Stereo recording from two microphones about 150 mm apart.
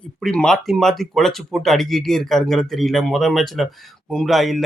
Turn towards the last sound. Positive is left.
turn(degrees=0)  # may be behind; listen again after turning